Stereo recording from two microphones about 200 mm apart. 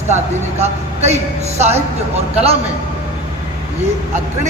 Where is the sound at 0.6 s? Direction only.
35° right (ahead or behind).